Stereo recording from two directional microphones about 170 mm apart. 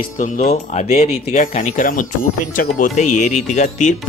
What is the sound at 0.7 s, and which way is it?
Speech, 40° left (ahead or behind).